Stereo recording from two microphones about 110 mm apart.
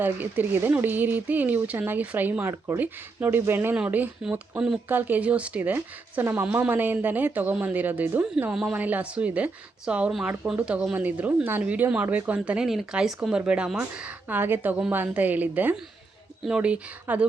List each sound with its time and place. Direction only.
0.0 s speech: 15° right (ahead or behind)
4.9 s speech: 15° right (ahead or behind)
8.5 s speech: 5° right (ahead or behind)
8.8 s speech: 15° right (ahead or behind)